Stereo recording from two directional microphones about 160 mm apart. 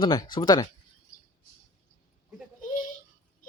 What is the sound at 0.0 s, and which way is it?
Speech, 25° left (ahead or behind).